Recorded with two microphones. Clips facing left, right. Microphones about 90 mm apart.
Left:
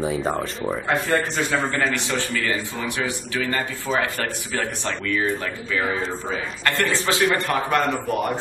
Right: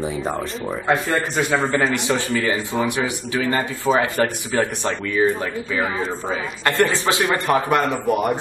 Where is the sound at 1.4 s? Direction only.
20° right (ahead or behind).